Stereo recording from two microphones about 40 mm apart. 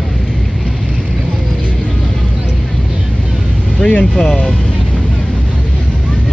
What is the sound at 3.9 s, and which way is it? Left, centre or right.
Speech, left.